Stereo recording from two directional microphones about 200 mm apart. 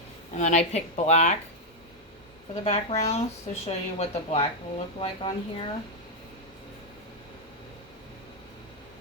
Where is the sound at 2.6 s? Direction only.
35° left (ahead or behind).